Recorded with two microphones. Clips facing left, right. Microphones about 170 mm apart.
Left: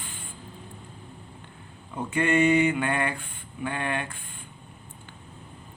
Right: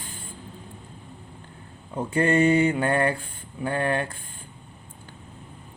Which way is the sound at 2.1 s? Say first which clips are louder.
Right 2 dB; 35° right (ahead or behind).